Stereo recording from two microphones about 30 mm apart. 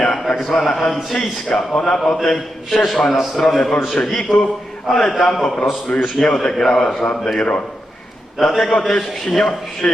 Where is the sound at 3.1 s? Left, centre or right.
Centre.